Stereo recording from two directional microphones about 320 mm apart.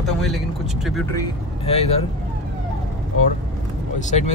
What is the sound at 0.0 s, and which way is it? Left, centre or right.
Speech, centre.